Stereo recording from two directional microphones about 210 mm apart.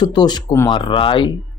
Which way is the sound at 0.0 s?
20° left (ahead or behind).